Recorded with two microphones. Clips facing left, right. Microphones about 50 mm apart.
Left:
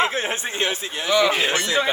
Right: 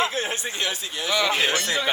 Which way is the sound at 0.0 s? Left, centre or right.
Left.